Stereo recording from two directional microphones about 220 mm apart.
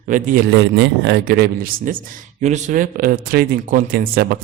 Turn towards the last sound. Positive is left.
turn(degrees=-45)  # may be behind; listen again after turning